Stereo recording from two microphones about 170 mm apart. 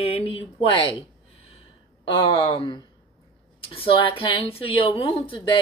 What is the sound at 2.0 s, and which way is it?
A woman's voice, 30° left (ahead or behind).